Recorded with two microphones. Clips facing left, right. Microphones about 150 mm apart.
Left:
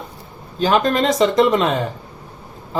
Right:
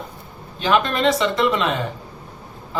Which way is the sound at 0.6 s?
40° left (ahead or behind).